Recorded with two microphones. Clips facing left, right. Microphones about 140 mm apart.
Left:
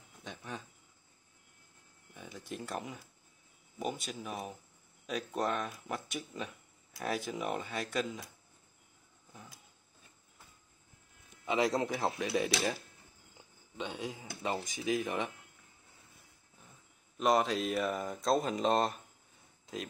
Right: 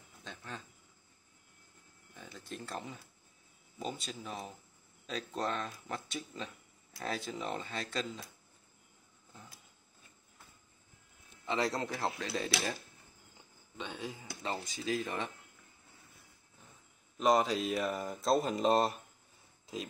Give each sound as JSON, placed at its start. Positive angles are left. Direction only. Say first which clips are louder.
{"t": 0.2, "sound": "a sound", "louder": "left 3 dB", "side_deg": 15}
{"t": 2.1, "sound": "a sound", "louder": "left 3 dB", "side_deg": 15}
{"t": 3.8, "sound": "speech", "louder": "left 3 dB", "side_deg": 5}
{"t": 11.4, "sound": "speech", "louder": "left 3 dB", "side_deg": 15}
{"t": 13.7, "sound": "speech", "louder": "left 3 dB", "side_deg": 15}
{"t": 17.2, "sound": "speech", "louder": "even", "side_deg": 0}